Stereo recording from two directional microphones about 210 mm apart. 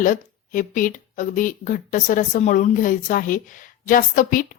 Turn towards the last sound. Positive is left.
turn(degrees=40)  # may be behind; listen again after turning